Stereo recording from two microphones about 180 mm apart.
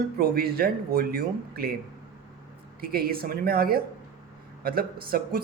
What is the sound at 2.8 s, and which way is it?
Speech, 55° right (ahead or behind).